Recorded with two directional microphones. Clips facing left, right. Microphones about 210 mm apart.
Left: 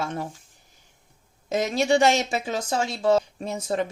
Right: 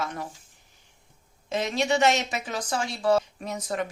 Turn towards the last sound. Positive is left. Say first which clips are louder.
# left 4 dB
turn(degrees=25)  # may be behind; listen again after turning